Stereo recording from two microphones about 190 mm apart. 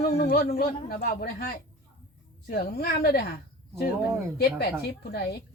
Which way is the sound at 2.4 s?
55° left (ahead or behind).